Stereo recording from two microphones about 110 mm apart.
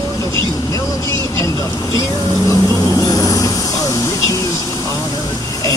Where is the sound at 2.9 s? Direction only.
35° left (ahead or behind).